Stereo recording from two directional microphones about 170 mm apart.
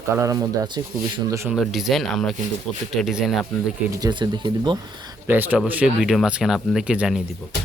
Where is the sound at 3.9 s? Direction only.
25° right (ahead or behind).